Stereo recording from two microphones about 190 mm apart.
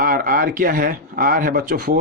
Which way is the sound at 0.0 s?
45° right (ahead or behind).